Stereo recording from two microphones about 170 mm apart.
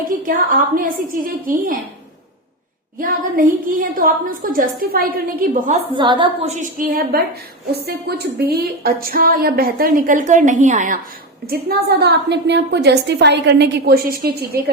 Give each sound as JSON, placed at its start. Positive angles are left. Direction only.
{"t": 0.0, "sound": "a woman's voice", "side_deg": -55}
{"t": 3.0, "sound": "a woman's voice", "side_deg": -55}
{"t": 5.9, "sound": "a woman's voice", "side_deg": -30}
{"t": 6.4, "sound": "a woman's voice", "side_deg": -45}
{"t": 7.7, "sound": "a woman's voice", "side_deg": -70}
{"t": 11.4, "sound": "a woman's voice", "side_deg": -65}